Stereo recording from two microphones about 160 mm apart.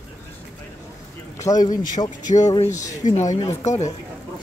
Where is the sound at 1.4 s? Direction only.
20° left (ahead or behind).